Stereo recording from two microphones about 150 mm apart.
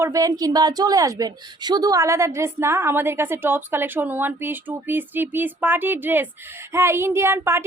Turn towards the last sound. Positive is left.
turn(degrees=-15)  # may be behind; listen again after turning